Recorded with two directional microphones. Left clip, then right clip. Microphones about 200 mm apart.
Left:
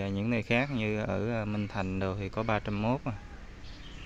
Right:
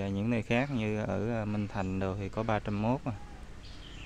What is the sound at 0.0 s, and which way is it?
Speech, 5° right (ahead or behind).